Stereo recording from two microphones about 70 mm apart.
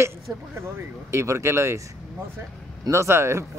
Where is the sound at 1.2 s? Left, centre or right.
Right.